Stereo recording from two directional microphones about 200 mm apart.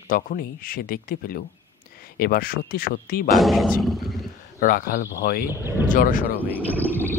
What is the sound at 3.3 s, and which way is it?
Speech, centre (ahead or behind).